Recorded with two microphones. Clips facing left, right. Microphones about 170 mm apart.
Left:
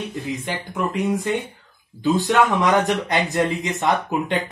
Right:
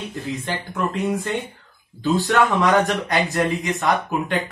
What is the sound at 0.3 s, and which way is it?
Speech, 15° left (ahead or behind).